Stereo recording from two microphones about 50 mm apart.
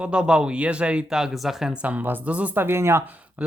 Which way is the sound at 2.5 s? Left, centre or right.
Right.